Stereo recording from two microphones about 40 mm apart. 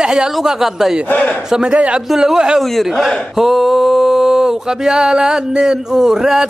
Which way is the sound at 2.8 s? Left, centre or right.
Centre.